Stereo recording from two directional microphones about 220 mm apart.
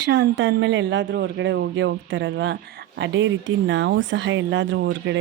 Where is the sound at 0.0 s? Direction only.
55° right (ahead or behind).